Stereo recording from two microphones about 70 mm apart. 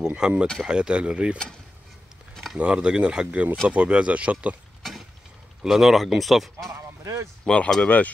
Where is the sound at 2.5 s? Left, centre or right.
Centre.